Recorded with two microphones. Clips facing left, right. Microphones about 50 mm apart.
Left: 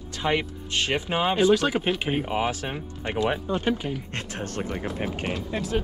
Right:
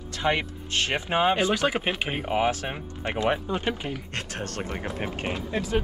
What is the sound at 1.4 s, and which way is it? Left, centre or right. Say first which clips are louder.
Speech: left 3 dB; right.